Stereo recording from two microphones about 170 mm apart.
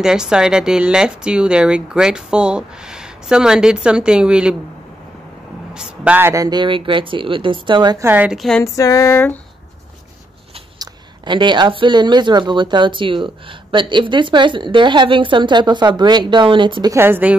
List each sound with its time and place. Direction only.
0.0 s speech: 5° right (ahead or behind)
5.8 s speech: 10° right (ahead or behind); by 8.1 s 25° right (ahead or behind)
8.1 s speech: 5° right (ahead or behind)
8.7 s a sound: 20° left (ahead or behind)
10.8 s speech: 25° right (ahead or behind)
16.9 s a woman's voice: 10° right (ahead or behind)